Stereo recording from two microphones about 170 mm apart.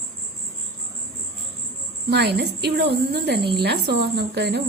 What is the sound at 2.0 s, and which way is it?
A woman's voice, 75° right (ahead or behind).